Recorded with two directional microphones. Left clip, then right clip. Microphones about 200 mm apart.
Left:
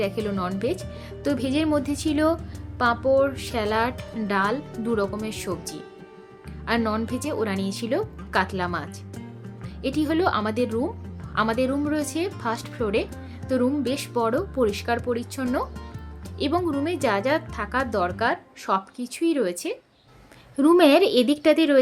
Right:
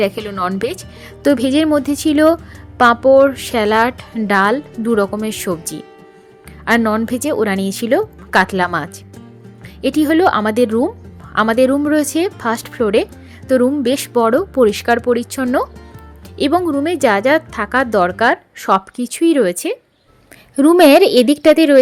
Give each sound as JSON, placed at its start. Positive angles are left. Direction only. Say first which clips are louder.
{"t": 0.0, "sound": "speech", "louder": "right 9 dB", "side_deg": -40}
{"t": 6.7, "sound": "speech", "louder": "right 10 dB", "side_deg": -35}